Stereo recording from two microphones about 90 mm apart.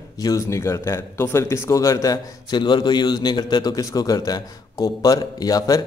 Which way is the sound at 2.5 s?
55° left (ahead or behind).